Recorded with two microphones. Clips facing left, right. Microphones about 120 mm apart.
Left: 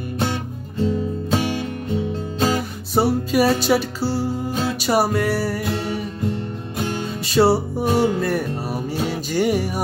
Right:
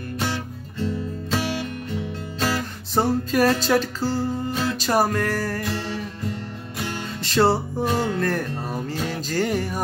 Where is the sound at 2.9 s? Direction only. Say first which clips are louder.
Left 3 dB; 10° left (ahead or behind).